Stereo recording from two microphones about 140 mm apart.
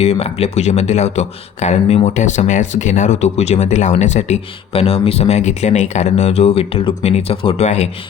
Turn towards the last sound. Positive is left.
turn(degrees=55)  # may be behind; listen again after turning